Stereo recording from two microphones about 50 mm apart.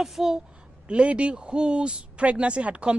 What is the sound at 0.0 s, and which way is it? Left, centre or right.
Speech, centre.